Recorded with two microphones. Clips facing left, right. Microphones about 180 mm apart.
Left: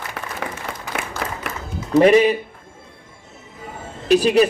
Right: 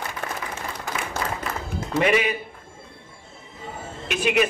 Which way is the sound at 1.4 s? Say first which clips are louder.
Even; 75° left (ahead or behind).